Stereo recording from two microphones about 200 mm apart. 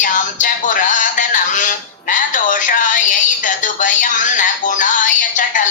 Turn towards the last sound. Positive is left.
turn(degrees=40)  # may be behind; listen again after turning